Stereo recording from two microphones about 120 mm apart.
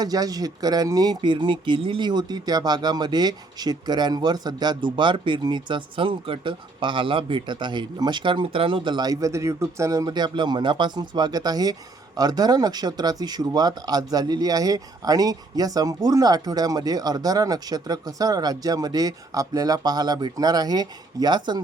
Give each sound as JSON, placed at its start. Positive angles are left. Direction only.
{"t": 0.0, "sound": "speech", "side_deg": -30}